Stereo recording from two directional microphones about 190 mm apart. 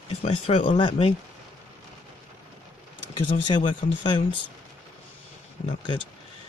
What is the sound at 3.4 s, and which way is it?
Speech, 25° left (ahead or behind).